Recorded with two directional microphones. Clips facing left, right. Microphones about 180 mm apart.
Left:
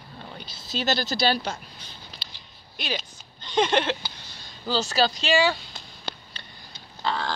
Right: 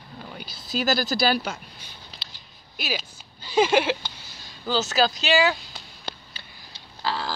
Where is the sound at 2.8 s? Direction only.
5° right (ahead or behind).